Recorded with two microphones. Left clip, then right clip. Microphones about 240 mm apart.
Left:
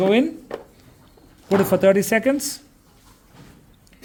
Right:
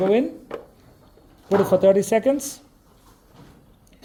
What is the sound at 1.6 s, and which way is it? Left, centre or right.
Speech, left.